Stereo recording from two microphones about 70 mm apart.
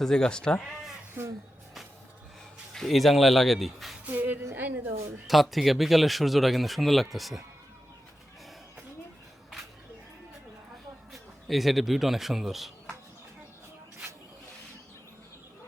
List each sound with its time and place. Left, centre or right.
0.0 s speech: centre
2.7 s speech: centre
4.0 s music: right
5.3 s speech: centre
11.1 s a man's voice: centre